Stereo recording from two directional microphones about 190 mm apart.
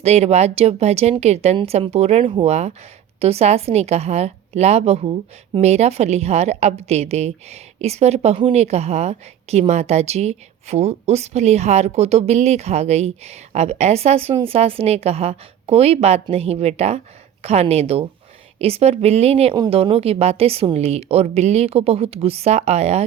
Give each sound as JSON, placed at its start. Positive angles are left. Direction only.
{"t": 0.0, "sound": "a woman's voice", "side_deg": -35}